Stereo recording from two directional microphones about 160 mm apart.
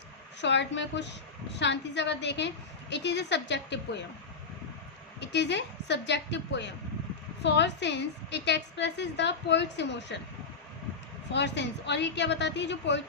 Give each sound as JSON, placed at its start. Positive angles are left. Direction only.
{"t": 0.4, "sound": "a woman's voice", "side_deg": 90}
{"t": 5.2, "sound": "a woman's voice", "side_deg": 90}
{"t": 11.3, "sound": "a woman's voice", "side_deg": 90}